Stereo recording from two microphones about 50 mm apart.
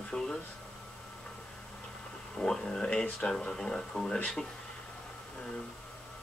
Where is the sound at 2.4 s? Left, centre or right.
Centre.